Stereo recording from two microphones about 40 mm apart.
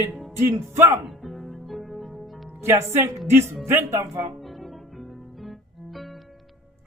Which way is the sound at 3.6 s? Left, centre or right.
Right.